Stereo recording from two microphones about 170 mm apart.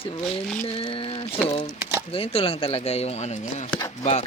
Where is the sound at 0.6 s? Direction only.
35° left (ahead or behind).